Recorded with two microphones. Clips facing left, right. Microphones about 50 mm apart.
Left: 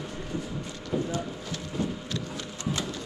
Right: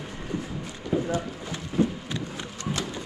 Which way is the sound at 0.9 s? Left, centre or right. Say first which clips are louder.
Right 4 dB; right.